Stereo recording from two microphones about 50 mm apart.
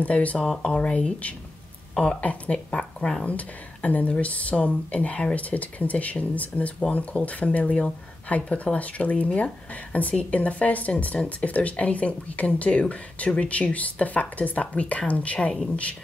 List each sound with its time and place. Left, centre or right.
0.0 s speech: left
3.3 s speech: left